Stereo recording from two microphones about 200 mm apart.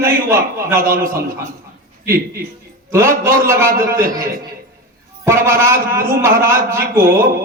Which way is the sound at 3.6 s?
45° right (ahead or behind).